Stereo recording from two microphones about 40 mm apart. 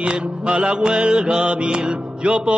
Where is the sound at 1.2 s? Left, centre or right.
Right.